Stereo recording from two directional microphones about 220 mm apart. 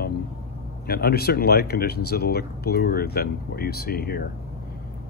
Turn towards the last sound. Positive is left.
turn(degrees=45)  # may be behind; listen again after turning